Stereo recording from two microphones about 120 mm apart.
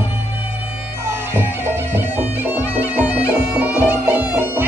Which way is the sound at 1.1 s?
20° right (ahead or behind).